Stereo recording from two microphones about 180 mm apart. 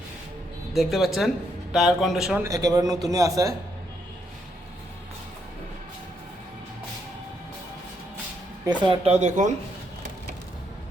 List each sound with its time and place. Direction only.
0.7 s speech: centre (ahead or behind)
2.4 s a man's voice: 20° right (ahead or behind)
8.6 s speech: 30° right (ahead or behind)